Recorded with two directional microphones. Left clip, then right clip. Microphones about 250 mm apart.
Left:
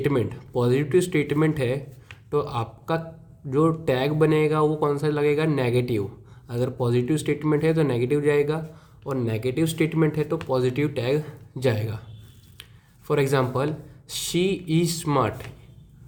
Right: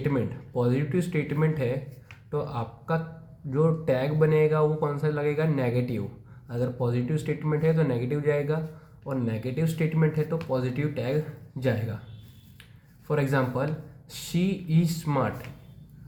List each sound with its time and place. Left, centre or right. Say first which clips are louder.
0.0 s speech: left 5 dB; left
13.1 s speech: left 4 dB; left